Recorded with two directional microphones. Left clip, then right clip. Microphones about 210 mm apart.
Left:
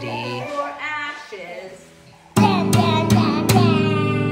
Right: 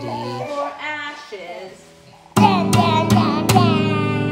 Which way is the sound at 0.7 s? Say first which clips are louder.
Left 1 dB; 45° right (ahead or behind).